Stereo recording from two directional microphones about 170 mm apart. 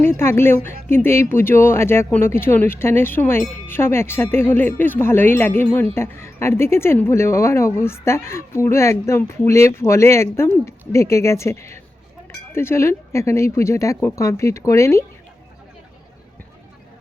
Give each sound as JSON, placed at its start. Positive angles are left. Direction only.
{"t": 0.0, "sound": "speech", "side_deg": 15}